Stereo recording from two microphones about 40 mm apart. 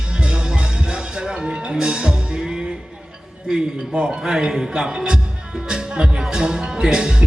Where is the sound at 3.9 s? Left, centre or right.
Right.